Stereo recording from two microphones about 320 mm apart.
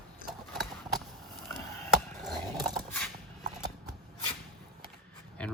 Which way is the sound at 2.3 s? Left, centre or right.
Centre.